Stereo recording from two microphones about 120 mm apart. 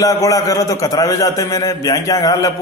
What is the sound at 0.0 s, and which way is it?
A man's voice, 30° left (ahead or behind).